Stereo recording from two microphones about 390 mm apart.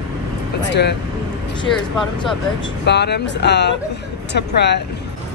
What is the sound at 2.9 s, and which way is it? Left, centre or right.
Speech, left.